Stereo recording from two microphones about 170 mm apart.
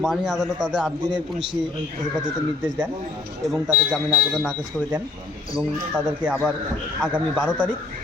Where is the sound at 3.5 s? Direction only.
10° right (ahead or behind).